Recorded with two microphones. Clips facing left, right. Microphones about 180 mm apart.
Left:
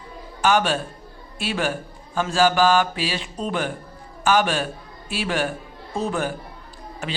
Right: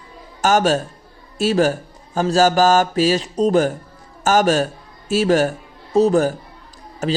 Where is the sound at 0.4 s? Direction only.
40° right (ahead or behind).